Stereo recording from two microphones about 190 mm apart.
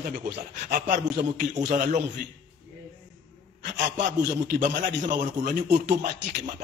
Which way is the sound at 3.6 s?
45° right (ahead or behind).